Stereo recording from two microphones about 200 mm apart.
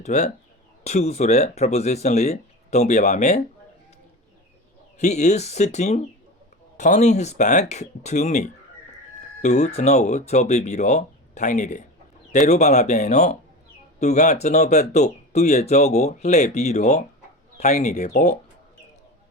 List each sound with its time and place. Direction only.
0.0 s speech: 35° left (ahead or behind)
4.9 s speech: 35° left (ahead or behind)